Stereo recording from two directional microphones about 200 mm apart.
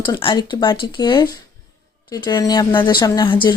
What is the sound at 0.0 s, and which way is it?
A woman's voice, 25° left (ahead or behind).